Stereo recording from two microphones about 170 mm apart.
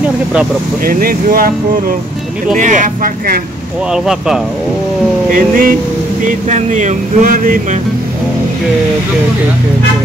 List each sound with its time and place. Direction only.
0.8 s speech: 60° right (ahead or behind)
2.5 s speech: 50° right (ahead or behind)
3.9 s speech: 5° right (ahead or behind)
5.3 s speech: 55° right (ahead or behind)